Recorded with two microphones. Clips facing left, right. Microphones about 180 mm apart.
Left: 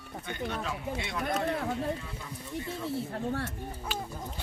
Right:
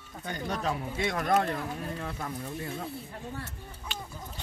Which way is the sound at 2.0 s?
70° right (ahead or behind).